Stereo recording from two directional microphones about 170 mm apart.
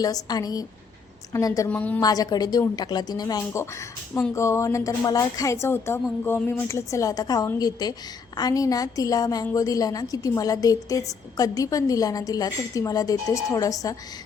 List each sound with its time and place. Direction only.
0.0 s a woman's voice: 20° left (ahead or behind)
1.7 s a woman's voice: 10° left (ahead or behind)
2.0 s a woman's voice: 20° left (ahead or behind)